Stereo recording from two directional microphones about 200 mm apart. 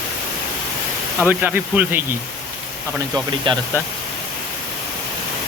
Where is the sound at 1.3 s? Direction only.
10° right (ahead or behind).